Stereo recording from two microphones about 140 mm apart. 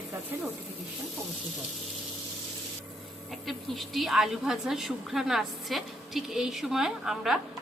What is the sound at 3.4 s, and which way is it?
A woman's voice, centre (ahead or behind).